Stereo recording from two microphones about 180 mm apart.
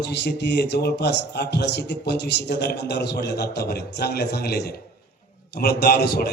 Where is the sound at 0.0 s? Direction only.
70° left (ahead or behind).